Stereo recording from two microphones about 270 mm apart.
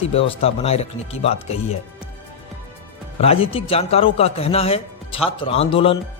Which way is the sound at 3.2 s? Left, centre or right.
Left.